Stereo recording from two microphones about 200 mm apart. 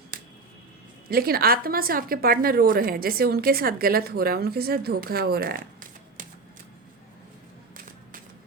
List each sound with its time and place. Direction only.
0.1 s music: 45° right (ahead or behind)
1.1 s a woman's voice: 50° right (ahead or behind)